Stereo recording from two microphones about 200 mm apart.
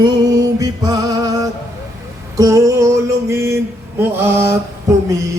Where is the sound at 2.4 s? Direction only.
15° right (ahead or behind).